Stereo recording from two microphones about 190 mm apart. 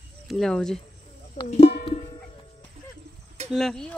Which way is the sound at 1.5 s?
35° left (ahead or behind).